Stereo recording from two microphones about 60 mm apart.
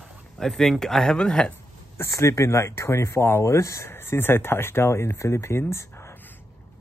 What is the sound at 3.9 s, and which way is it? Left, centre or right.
Speech, left.